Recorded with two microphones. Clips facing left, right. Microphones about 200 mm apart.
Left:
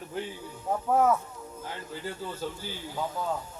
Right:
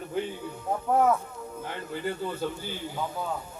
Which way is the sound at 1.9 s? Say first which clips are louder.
Right 6 dB; 60° right (ahead or behind).